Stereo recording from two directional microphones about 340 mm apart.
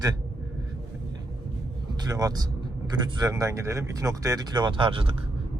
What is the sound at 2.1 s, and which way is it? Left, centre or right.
Speech, centre.